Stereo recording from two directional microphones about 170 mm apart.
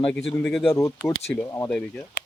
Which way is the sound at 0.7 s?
15° left (ahead or behind).